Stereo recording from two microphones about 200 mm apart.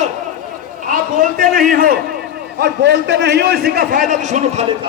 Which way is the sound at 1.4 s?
45° right (ahead or behind).